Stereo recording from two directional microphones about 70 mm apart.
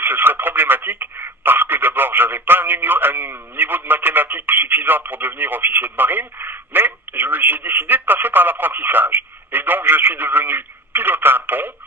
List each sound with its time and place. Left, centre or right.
0.0 s speech: right